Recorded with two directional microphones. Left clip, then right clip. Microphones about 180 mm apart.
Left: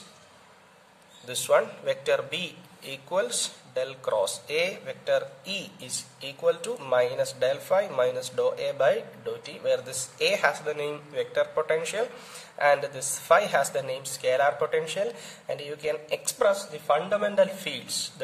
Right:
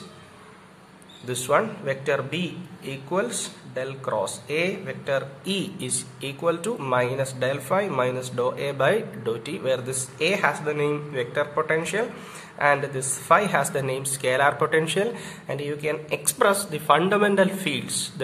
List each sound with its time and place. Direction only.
1.2 s speech: 30° left (ahead or behind)
9.8 s speech: 35° left (ahead or behind)
16.3 s a man's voice: 10° left (ahead or behind)